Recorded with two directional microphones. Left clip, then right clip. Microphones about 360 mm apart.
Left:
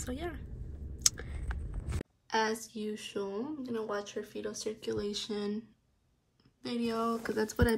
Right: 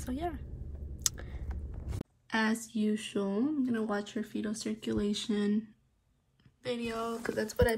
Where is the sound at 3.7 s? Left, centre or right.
Right.